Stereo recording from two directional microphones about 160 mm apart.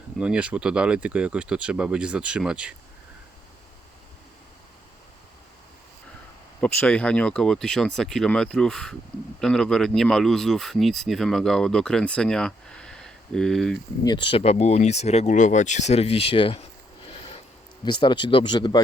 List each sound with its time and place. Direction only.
0.2 s speech: 5° right (ahead or behind)
6.6 s speech: 10° left (ahead or behind)
14.0 s speech: 30° left (ahead or behind)
17.1 s a sound: 35° left (ahead or behind)
17.8 s a man's voice: 30° left (ahead or behind)